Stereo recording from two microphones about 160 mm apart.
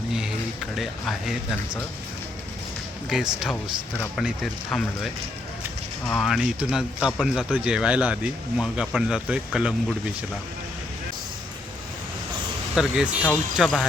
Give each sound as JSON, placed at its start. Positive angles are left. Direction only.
{"t": 0.1, "sound": "a sound", "side_deg": -5}
{"t": 0.8, "sound": "speech", "side_deg": 0}
{"t": 3.1, "sound": "speech", "side_deg": -5}
{"t": 3.5, "sound": "speech", "side_deg": 10}
{"t": 4.2, "sound": "speech", "side_deg": 0}
{"t": 6.1, "sound": "speech", "side_deg": 0}
{"t": 12.7, "sound": "speech", "side_deg": -5}
{"t": 13.2, "sound": "speech", "side_deg": 5}